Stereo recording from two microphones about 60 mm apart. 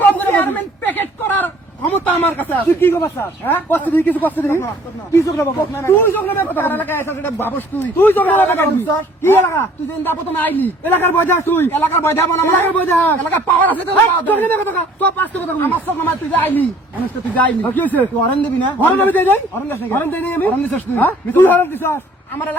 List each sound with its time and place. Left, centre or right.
0.0 s a sound: left
2.0 s a man's voice: left
5.1 s speech: left
5.5 s a man's voice: left
7.0 s a man's voice: left